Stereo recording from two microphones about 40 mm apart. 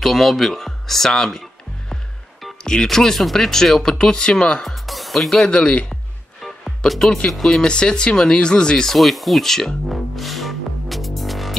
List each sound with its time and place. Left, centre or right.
0.0 s music: centre
2.6 s speech: centre
4.6 s speech: centre
5.5 s speech: left
6.4 s music: centre
7.2 s speech: centre
7.6 s speech: left
8.8 s speech: centre
9.8 s music: centre